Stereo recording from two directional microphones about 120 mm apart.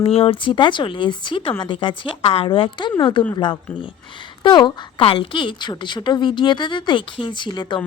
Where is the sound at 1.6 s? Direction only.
40° left (ahead or behind).